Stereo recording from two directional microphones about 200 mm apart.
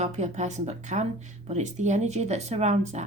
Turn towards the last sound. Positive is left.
turn(degrees=-35)  # may be behind; listen again after turning